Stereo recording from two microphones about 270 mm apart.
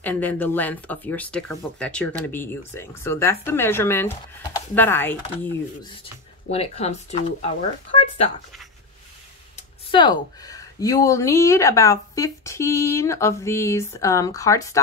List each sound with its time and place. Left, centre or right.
0.0 s speech: centre
6.5 s speech: left
9.6 s speech: centre